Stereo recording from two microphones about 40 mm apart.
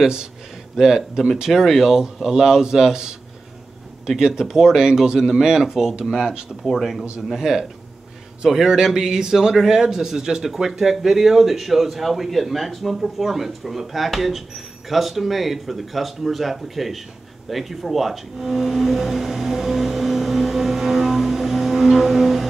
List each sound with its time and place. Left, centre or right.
0.0 s a man's voice: centre
4.2 s a man's voice: centre
6.5 s a man's voice: centre
7.3 s a man's voice: centre
17.5 s music: centre